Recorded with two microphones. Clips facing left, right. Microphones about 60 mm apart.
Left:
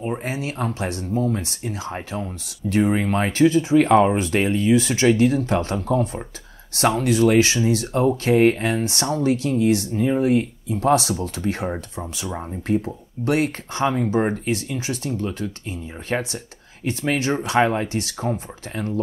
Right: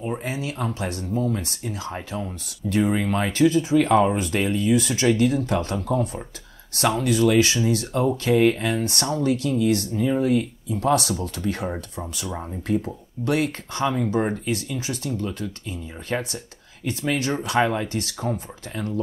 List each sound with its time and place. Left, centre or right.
0.2 s speech: left; by 12.5 s centre
13.2 s speech: left
14.0 s speech: centre
14.3 s speech: left